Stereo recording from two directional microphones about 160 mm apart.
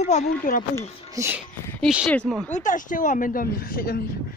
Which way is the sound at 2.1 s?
5° left (ahead or behind).